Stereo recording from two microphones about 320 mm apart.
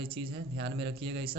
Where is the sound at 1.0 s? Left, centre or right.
Centre.